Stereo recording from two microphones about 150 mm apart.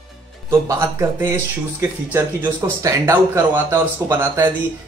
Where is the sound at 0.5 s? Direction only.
20° right (ahead or behind).